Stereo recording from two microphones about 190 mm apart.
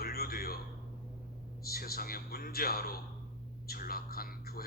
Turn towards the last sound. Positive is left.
turn(degrees=50)  # may be behind; listen again after turning